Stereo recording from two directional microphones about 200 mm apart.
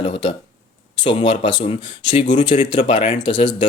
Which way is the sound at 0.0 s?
25° left (ahead or behind).